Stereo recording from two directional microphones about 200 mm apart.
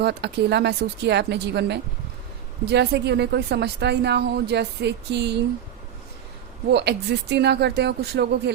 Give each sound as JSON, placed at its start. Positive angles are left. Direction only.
{"t": 0.0, "sound": "a woman's voice", "side_deg": -55}
{"t": 6.7, "sound": "a woman's voice", "side_deg": -60}